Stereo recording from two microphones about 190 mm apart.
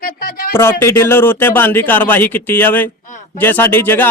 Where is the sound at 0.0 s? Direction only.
50° left (ahead or behind).